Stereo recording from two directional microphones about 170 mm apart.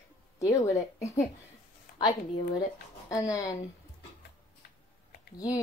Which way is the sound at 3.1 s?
20° left (ahead or behind).